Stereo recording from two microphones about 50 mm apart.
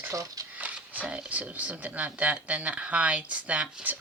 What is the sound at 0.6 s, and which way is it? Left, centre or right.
Speech, right.